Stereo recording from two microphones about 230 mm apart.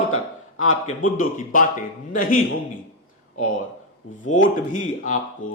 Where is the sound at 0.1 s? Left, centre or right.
Left.